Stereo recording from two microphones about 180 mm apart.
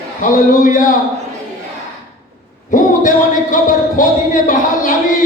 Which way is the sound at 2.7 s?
45° left (ahead or behind).